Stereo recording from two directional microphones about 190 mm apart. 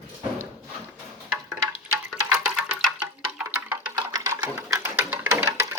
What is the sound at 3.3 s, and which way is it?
Music, 10° right (ahead or behind).